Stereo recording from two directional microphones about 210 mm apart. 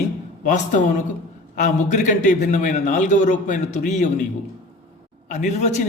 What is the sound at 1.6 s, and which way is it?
A man's voice, 35° left (ahead or behind).